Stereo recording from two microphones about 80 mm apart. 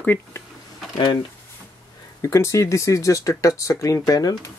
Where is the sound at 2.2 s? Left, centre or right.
Left.